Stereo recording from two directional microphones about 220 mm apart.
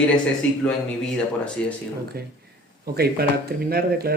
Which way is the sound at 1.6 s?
5° left (ahead or behind).